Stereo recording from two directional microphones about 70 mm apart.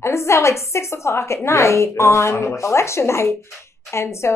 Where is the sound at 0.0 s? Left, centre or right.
Left.